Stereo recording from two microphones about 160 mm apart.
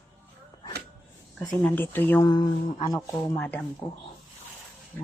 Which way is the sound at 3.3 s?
10° left (ahead or behind).